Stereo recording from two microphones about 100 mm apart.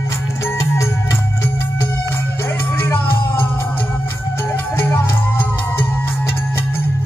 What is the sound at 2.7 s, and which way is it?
Music, 20° left (ahead or behind).